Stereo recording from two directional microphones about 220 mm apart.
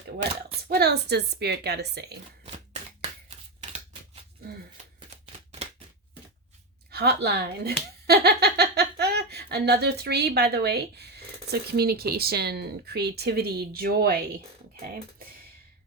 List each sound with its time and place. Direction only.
0.7 s speech: 50° right (ahead or behind)
4.9 s shuffling cards: 25° right (ahead or behind)
6.9 s speech: 45° right (ahead or behind)